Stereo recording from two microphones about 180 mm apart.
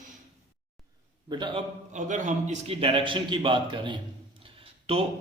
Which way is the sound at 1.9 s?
45° right (ahead or behind).